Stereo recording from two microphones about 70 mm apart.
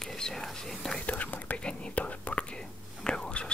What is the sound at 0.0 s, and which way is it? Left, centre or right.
Speech, centre.